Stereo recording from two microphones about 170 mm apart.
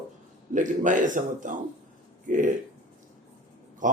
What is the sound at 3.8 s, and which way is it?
Speech, 50° right (ahead or behind).